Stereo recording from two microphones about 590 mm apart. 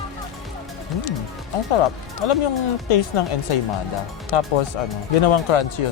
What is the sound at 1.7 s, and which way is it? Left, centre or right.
Speech, left.